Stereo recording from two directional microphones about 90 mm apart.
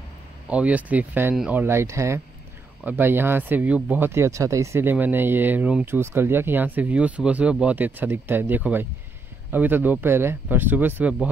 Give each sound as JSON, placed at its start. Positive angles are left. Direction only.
{"t": 0.5, "sound": "speech", "side_deg": -15}
{"t": 2.8, "sound": "speech", "side_deg": -20}